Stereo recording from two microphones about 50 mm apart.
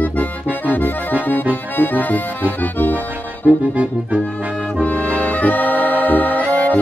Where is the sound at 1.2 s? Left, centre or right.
Left.